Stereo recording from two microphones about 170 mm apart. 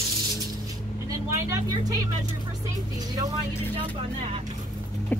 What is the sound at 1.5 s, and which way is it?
Speech, 20° right (ahead or behind).